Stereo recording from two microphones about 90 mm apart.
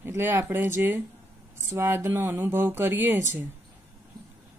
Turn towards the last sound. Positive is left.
turn(degrees=-25)  # may be behind; listen again after turning